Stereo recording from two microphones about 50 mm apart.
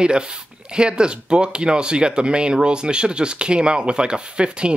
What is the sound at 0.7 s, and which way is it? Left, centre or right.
Speech, centre.